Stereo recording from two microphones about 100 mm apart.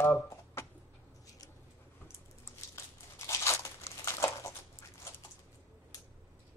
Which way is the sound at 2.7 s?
30° left (ahead or behind).